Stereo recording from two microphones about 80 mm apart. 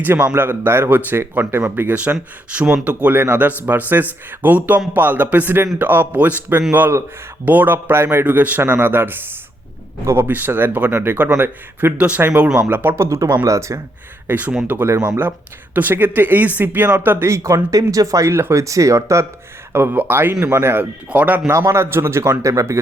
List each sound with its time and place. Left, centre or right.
0.0 s a man's voice: right
12.5 s speech: right
14.3 s a man's voice: right
14.9 s speech: right
15.7 s a man's voice: right
17.3 s speech: right
19.7 s a man's voice: right
21.1 s a man's voice: centre
21.5 s speech: right